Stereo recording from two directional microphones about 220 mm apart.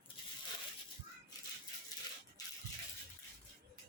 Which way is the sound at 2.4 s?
15° left (ahead or behind).